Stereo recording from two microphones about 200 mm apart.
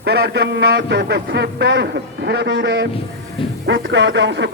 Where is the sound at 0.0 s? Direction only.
55° right (ahead or behind).